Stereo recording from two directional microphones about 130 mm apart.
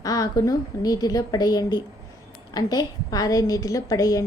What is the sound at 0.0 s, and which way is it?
A woman's voice, 30° left (ahead or behind).